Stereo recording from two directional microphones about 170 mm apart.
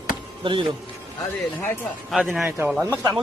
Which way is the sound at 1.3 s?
15° left (ahead or behind).